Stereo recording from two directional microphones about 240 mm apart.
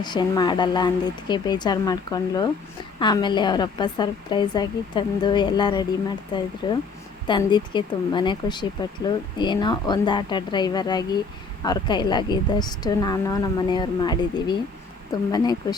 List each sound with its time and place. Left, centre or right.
0.0 s speech: centre